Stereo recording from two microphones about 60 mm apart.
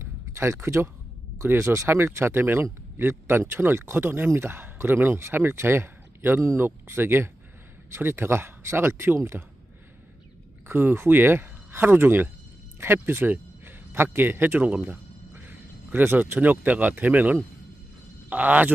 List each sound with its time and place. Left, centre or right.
0.0 s a sound: right
1.4 s speech: right
10.7 s speech: right